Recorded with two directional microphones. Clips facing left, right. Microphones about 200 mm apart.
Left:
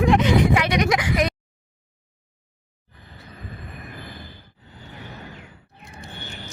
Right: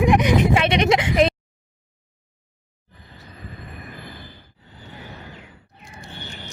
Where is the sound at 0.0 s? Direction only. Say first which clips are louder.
Even; 15° right (ahead or behind).